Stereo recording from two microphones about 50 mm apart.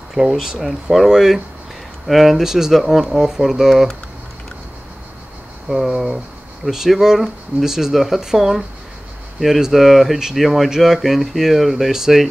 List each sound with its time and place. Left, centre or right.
0.1 s speech: centre
2.8 s speech: centre
3.1 s speech: centre
5.7 s speech: centre